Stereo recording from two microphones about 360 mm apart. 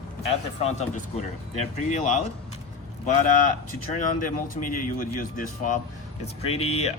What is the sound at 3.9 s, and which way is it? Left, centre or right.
Speech, left.